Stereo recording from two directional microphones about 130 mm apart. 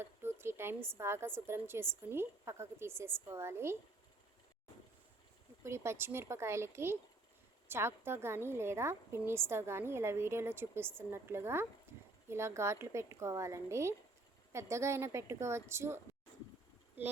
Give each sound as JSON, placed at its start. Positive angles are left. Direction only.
{"t": 0.0, "sound": "a woman's voice", "side_deg": -20}
{"t": 5.6, "sound": "a woman's voice", "side_deg": -20}